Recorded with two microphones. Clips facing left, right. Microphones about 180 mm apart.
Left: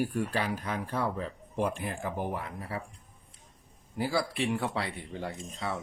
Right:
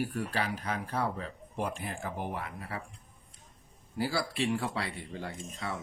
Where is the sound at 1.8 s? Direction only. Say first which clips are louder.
Left 3 dB; 50° left (ahead or behind).